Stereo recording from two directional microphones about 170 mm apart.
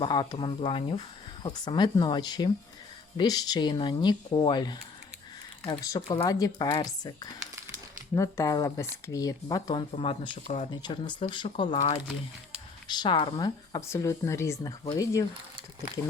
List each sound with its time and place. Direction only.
0.0 s speech: 25° left (ahead or behind)
6.1 s speech: 25° left (ahead or behind)
9.9 s speech: 35° left (ahead or behind)
10.4 s speech: 45° left (ahead or behind)
10.7 s speech: 25° left (ahead or behind)
11.7 s speech: 45° left (ahead or behind)
12.9 s speech: 25° left (ahead or behind)